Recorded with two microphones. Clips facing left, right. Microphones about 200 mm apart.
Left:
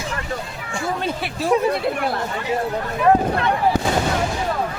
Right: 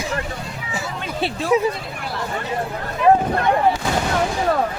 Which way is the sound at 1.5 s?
5° right (ahead or behind).